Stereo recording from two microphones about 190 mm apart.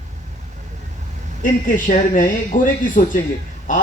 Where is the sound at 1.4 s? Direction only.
45° left (ahead or behind).